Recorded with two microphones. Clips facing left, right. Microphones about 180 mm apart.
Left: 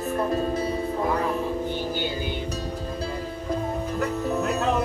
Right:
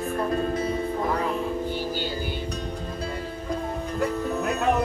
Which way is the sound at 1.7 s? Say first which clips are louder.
Left 1 dB; 20° left (ahead or behind).